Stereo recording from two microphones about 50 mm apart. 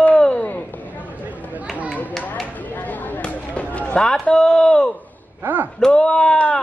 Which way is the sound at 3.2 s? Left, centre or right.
Left.